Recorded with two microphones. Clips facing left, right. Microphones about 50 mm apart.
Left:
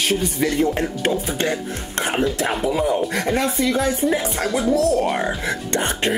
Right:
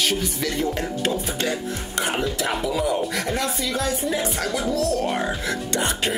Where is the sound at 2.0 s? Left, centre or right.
Centre.